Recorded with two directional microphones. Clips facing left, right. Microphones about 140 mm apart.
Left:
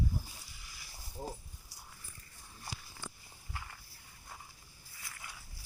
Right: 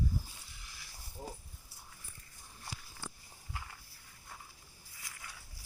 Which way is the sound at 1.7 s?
90° left.